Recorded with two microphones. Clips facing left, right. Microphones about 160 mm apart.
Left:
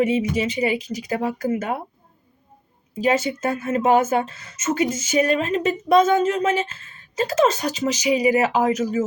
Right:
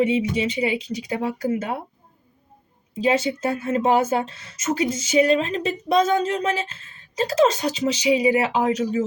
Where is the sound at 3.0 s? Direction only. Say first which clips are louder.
Even; 30° right (ahead or behind).